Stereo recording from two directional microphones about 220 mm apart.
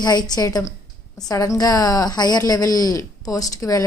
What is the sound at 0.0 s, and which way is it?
A woman's voice, 20° left (ahead or behind).